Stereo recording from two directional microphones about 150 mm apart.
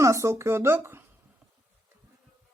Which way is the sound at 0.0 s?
20° right (ahead or behind).